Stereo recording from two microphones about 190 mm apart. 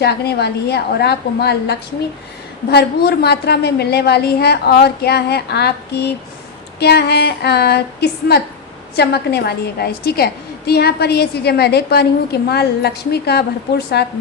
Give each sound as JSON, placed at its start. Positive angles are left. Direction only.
{"t": 0.0, "sound": "a woman's voice", "side_deg": 60}